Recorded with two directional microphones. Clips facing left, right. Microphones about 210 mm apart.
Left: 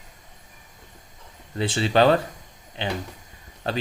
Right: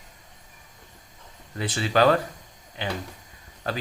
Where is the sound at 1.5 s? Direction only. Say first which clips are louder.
Left 3 dB; 25° left (ahead or behind).